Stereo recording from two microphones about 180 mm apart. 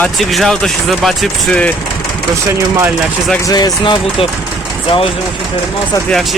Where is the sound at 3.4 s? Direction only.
20° left (ahead or behind).